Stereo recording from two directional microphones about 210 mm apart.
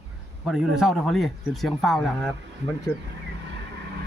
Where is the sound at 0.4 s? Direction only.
5° right (ahead or behind).